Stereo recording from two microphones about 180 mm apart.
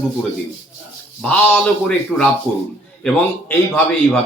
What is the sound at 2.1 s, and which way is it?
A man's voice, centre (ahead or behind).